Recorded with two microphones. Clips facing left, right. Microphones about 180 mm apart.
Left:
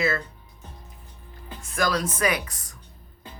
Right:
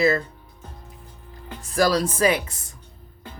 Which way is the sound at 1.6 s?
35° right (ahead or behind).